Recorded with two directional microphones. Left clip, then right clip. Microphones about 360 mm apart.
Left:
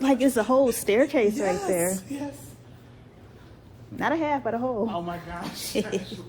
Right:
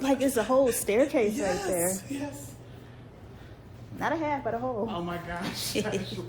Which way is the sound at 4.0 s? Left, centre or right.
Left.